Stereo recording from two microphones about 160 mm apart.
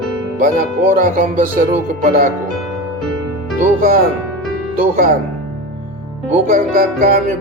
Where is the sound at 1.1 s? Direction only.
55° right (ahead or behind).